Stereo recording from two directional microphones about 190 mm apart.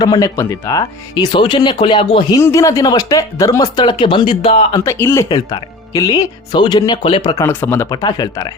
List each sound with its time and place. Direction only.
0.0 s speech: 20° left (ahead or behind)
2.4 s speech: 15° left (ahead or behind)
4.7 s speech: 15° left (ahead or behind)
7.3 s speech: 15° left (ahead or behind)